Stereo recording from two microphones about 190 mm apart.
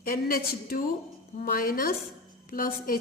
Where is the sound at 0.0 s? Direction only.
50° left (ahead or behind).